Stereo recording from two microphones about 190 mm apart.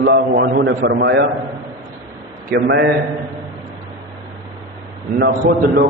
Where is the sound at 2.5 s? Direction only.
70° right (ahead or behind).